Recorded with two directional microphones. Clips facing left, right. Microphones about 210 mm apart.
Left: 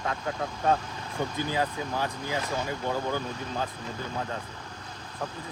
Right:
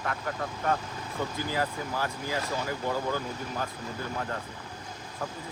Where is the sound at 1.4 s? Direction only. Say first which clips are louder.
Left 2 dB; 20° left (ahead or behind).